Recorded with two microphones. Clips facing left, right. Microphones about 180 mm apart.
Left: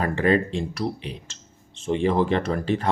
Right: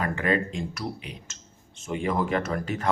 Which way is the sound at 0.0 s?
30° left (ahead or behind).